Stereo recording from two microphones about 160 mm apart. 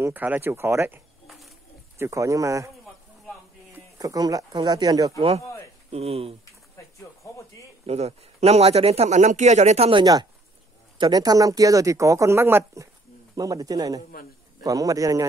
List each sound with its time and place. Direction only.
0.0 s speech: 10° right (ahead or behind)
1.2 s a sound: centre (ahead or behind)
2.0 s speech: 20° right (ahead or behind)
3.7 s speech: 20° right (ahead or behind)
5.9 s a man's voice: 40° right (ahead or behind)
7.0 s a sound: 20° left (ahead or behind)
7.8 s a man's voice: 40° right (ahead or behind)
11.0 s speech: 25° right (ahead or behind)